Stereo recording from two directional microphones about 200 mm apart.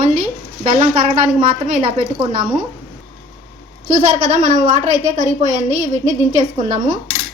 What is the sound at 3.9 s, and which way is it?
A woman's voice, 40° right (ahead or behind).